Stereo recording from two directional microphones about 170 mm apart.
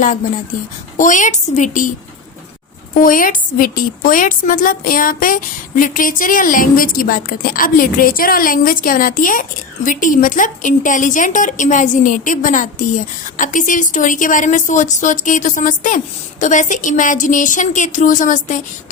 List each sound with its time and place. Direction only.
0.9 s a woman's voice: 45° left (ahead or behind)
3.0 s a woman's voice: 55° left (ahead or behind)